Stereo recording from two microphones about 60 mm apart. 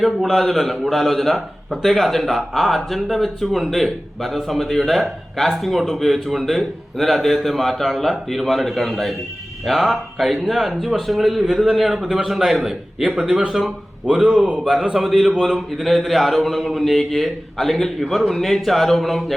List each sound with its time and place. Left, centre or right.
0.0 s a man's voice: centre
13.2 s speech: right
13.5 s a man's voice: centre
14.3 s a man's voice: centre